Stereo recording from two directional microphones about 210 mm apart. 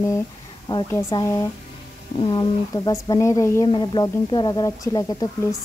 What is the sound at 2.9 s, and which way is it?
Speech, 15° left (ahead or behind).